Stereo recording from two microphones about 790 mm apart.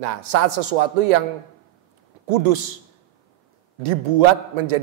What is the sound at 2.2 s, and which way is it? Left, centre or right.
Speech, right.